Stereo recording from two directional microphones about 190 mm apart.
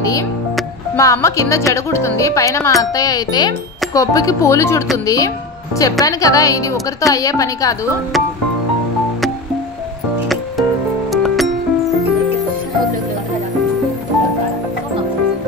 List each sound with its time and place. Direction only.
0.9 s speech: 15° left (ahead or behind)
11.1 s music: centre (ahead or behind)